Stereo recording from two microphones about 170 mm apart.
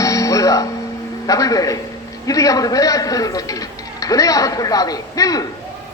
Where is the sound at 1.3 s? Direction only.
20° left (ahead or behind).